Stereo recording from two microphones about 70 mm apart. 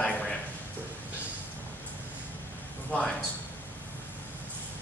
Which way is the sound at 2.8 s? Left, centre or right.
Centre.